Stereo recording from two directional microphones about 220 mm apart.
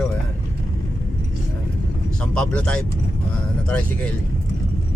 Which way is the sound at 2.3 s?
5° left (ahead or behind).